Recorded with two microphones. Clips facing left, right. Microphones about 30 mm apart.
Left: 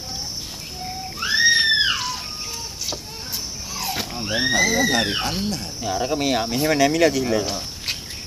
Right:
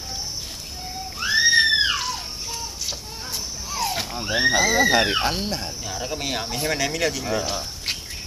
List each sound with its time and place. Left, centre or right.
1.2 s a sound: centre
3.7 s speech: centre
5.4 s cricket: centre
5.8 s speech: centre